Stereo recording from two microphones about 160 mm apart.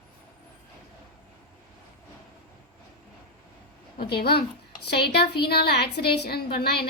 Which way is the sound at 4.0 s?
80° left.